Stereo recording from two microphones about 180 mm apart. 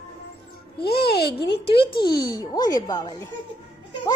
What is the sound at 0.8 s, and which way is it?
Speech, 60° left (ahead or behind).